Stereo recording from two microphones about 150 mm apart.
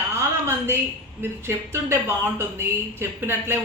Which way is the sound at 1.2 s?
15° right (ahead or behind).